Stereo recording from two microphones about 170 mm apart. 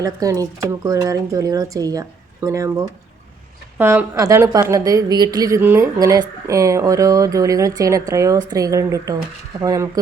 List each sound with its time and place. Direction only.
0.0 s a woman's voice: 20° right (ahead or behind)